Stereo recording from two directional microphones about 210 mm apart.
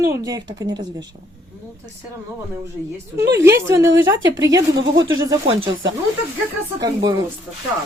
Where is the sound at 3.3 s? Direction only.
15° right (ahead or behind).